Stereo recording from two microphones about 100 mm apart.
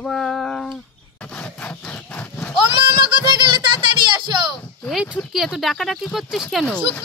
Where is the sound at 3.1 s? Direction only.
50° right (ahead or behind).